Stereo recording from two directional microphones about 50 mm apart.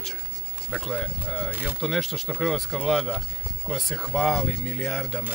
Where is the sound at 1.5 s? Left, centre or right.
Right.